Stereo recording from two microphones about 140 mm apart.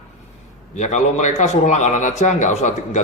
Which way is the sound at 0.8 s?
60° left (ahead or behind).